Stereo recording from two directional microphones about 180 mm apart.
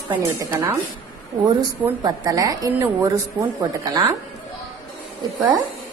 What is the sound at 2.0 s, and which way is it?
A woman's voice, 20° right (ahead or behind).